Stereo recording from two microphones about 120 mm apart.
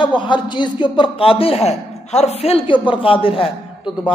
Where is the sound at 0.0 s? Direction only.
40° left (ahead or behind).